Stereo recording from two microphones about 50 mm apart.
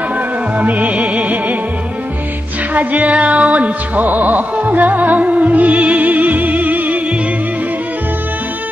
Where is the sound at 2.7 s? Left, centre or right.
Right.